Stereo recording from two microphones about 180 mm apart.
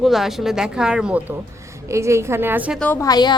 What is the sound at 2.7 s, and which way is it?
Speech, 10° left (ahead or behind).